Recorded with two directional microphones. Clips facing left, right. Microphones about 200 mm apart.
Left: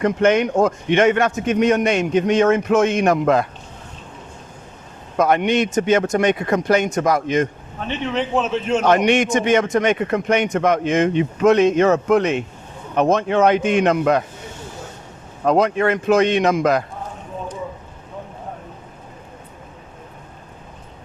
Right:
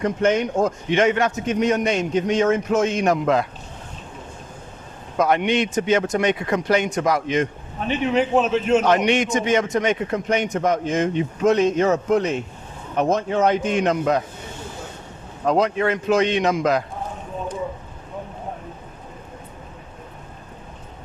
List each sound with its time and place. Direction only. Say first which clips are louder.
0.0 s a man's voice: left 3 dB; 70° left (ahead or behind); by 3.4 s 55° left (ahead or behind)
5.1 s speech: left 2 dB; 50° left (ahead or behind)
7.9 s a man's voice: right 3 dB; 10° right (ahead or behind)
8.8 s a man's voice: left 3 dB; 50° left (ahead or behind)
15.4 s speech: left 3 dB; 55° left (ahead or behind)